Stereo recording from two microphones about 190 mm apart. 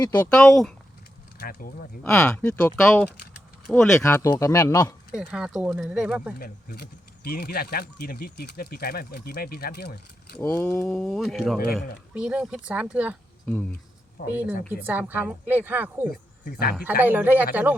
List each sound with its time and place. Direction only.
0.3 s speech: 5° left (ahead or behind)
1.4 s speech: 55° left (ahead or behind)
2.0 s speech: 5° left (ahead or behind)
5.1 s speech: 5° right (ahead or behind)
6.4 s speech: 55° left (ahead or behind)
10.4 s speech: 10° left (ahead or behind); by 13.1 s 5° right (ahead or behind)
13.4 s speech: 5° left (ahead or behind)
14.2 s speech: 55° left (ahead or behind)
14.7 s a woman's voice: 10° right (ahead or behind)
16.0 s speech: 50° left (ahead or behind)
16.7 s a woman's voice: 10° right (ahead or behind)